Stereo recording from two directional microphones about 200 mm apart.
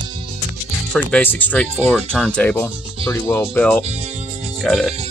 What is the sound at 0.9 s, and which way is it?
Speech, 5° left (ahead or behind).